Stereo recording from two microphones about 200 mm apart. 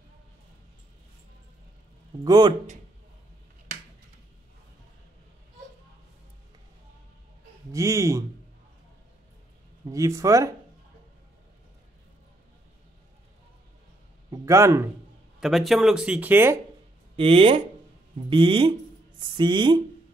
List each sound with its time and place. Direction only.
2.2 s speech: 20° right (ahead or behind)
7.7 s speech: 15° right (ahead or behind)
9.8 s speech: 15° right (ahead or behind)
14.3 s speech: 15° right (ahead or behind)
15.4 s speech: centre (ahead or behind)
17.2 s speech: 25° right (ahead or behind)